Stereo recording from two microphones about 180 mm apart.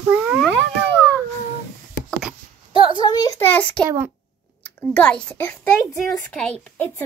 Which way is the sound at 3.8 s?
15° right (ahead or behind).